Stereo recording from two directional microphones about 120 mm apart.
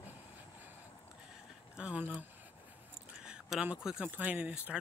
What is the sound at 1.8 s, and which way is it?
Speech, 10° right (ahead or behind).